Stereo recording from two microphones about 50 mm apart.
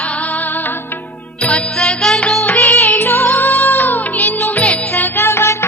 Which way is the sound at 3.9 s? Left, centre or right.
Left.